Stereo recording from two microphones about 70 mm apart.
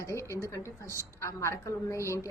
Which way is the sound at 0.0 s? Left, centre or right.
Left.